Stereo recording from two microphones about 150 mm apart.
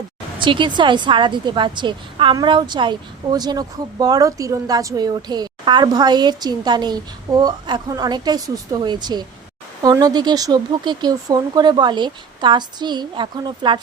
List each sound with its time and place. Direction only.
0.3 s a woman's voice: 35° right (ahead or behind)